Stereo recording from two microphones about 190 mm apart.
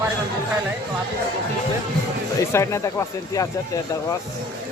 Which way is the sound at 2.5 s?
15° left (ahead or behind).